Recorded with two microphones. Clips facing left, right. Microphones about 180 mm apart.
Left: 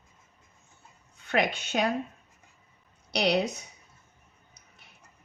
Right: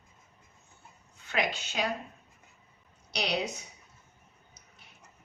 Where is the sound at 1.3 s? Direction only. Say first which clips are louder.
Left 5 dB; 55° left (ahead or behind).